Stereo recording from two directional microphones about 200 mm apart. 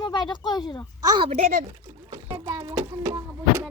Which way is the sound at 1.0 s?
20° right (ahead or behind).